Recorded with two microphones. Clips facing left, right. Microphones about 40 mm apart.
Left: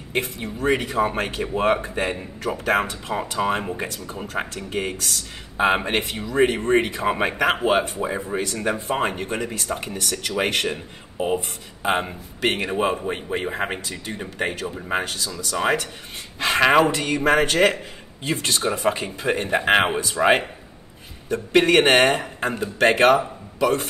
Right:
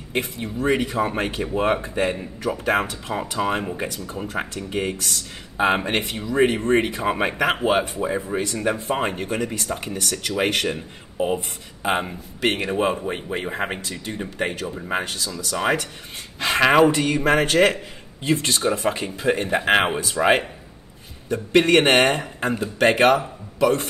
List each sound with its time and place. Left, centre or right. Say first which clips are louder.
0.1 s speech: even; centre